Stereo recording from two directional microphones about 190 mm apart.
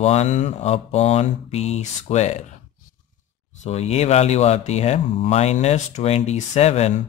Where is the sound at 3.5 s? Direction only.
35° left (ahead or behind).